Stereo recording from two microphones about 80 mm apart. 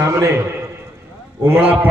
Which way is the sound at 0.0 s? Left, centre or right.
Right.